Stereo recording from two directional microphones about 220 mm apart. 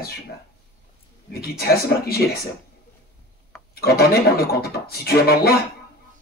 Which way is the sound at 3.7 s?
45° left (ahead or behind).